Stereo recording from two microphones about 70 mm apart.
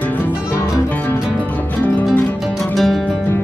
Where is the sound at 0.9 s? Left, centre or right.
Left.